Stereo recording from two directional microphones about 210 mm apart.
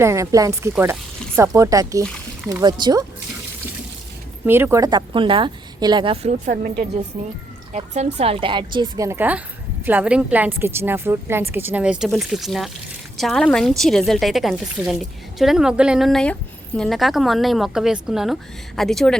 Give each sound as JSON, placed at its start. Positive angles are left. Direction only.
{"t": 0.0, "sound": "a woman's voice", "side_deg": -15}
{"t": 4.4, "sound": "a woman's voice", "side_deg": -10}